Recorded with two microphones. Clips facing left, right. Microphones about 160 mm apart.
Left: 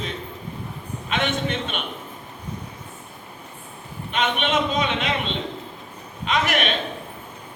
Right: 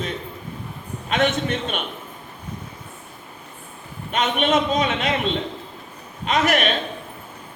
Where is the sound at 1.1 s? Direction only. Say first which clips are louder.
Right 4 dB; 45° right (ahead or behind).